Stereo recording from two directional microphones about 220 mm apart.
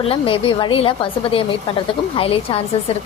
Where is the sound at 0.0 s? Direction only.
25° left (ahead or behind).